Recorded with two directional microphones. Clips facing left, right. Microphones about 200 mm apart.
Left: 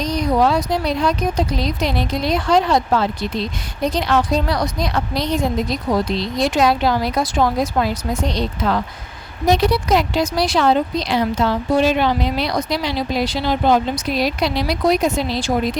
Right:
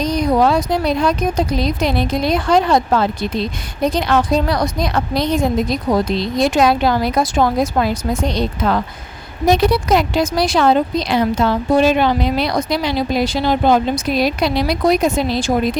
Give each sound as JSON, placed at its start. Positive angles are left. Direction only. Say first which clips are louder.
{"t": 0.0, "sound": "speech", "louder": "right 2 dB", "side_deg": -50}